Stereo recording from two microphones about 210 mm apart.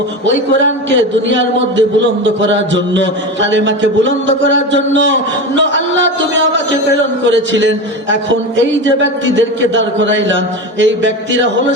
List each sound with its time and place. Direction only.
0.3 s a man's voice: 60° right (ahead or behind)